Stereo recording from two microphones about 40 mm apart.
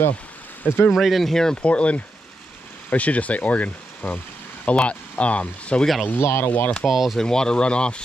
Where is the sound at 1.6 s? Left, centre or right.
Left.